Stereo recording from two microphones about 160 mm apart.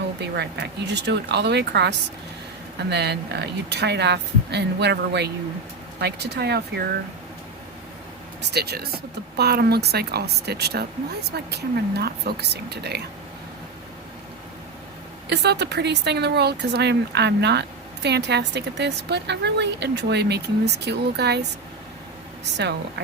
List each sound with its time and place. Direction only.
0.2 s speech: 90° right
8.4 s speech: 90° right
15.3 s speech: 90° right